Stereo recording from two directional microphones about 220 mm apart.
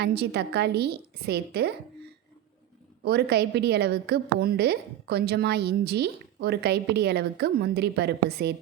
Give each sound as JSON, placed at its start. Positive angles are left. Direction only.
{"t": 0.0, "sound": "a woman's voice", "side_deg": -45}
{"t": 3.0, "sound": "a woman's voice", "side_deg": -45}